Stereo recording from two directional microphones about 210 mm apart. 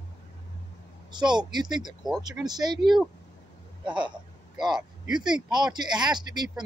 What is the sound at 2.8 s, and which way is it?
Speech, centre (ahead or behind).